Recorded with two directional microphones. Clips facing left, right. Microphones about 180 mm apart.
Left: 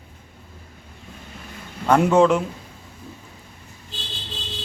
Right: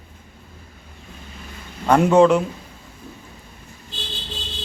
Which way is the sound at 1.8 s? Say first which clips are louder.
Right 1 dB; 10° right (ahead or behind).